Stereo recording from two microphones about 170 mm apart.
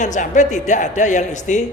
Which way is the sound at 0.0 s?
45° left (ahead or behind).